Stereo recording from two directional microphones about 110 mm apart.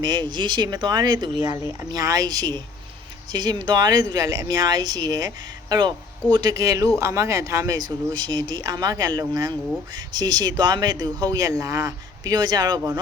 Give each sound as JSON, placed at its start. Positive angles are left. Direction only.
{"t": 0.0, "sound": "speech", "side_deg": -40}